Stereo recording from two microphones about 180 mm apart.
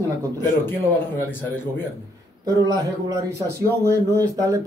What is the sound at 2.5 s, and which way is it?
Speech, 20° right (ahead or behind).